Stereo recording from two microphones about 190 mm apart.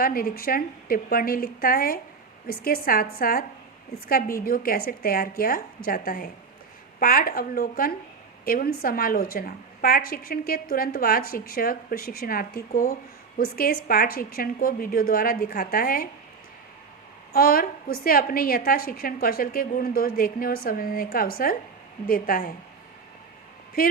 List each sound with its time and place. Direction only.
0.0 s a woman's voice: 50° left (ahead or behind)
17.3 s a woman's voice: 50° left (ahead or behind)